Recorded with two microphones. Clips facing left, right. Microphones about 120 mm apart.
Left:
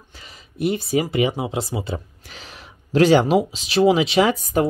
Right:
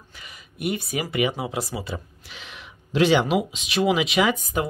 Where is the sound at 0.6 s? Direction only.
30° left (ahead or behind).